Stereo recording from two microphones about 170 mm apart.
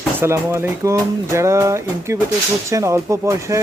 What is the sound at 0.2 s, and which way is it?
Speech, 15° right (ahead or behind).